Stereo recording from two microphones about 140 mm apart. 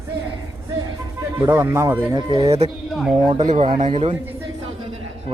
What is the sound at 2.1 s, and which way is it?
Speech, 30° right (ahead or behind).